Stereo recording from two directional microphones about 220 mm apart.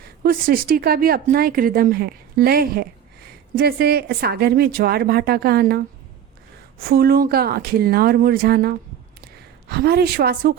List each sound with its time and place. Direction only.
0.2 s speech: 40° right (ahead or behind)
6.8 s a woman's voice: 45° right (ahead or behind)